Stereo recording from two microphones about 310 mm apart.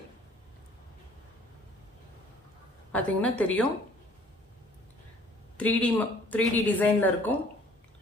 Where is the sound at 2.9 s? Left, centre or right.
Centre.